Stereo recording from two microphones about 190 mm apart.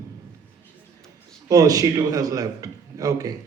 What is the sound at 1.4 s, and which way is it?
A man's voice, 20° right (ahead or behind).